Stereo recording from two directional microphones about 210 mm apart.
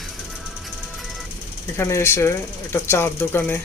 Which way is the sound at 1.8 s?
10° left (ahead or behind).